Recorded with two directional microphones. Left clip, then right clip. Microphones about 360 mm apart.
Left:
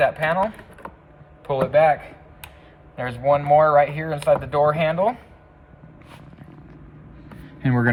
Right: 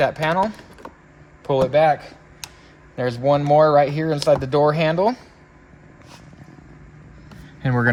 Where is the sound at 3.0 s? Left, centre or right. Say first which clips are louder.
Right 1 dB; right.